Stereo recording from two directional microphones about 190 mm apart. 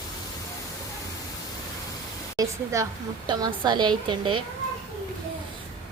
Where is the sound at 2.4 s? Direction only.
15° right (ahead or behind).